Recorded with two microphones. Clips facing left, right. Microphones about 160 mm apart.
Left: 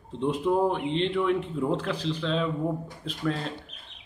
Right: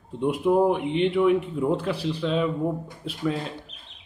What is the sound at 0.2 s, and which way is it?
A man's voice, 10° right (ahead or behind).